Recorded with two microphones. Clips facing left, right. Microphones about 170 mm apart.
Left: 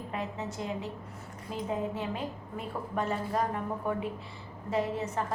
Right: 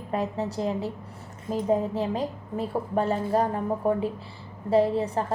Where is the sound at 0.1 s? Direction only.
35° right (ahead or behind).